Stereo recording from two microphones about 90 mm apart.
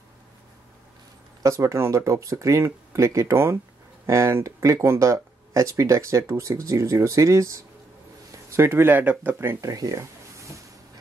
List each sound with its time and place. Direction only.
1.4 s speech: 35° right (ahead or behind)
9.6 s speech: 40° right (ahead or behind)